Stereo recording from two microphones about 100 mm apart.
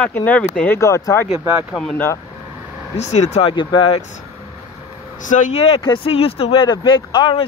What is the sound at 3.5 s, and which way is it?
Speech, 50° left (ahead or behind).